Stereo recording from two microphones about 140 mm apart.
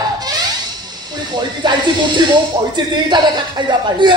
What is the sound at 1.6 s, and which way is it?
Speech, 35° right (ahead or behind).